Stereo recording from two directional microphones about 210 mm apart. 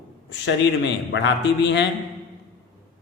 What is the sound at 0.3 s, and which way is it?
A man's voice, 55° left (ahead or behind).